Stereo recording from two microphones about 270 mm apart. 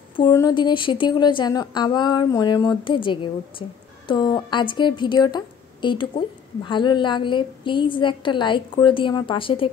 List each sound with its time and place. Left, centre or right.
0.1 s a woman's voice: centre